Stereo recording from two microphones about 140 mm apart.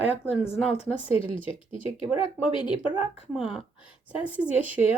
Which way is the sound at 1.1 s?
40° left (ahead or behind).